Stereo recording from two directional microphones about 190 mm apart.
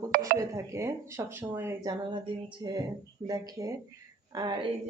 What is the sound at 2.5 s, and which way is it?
A woman's voice, 25° right (ahead or behind).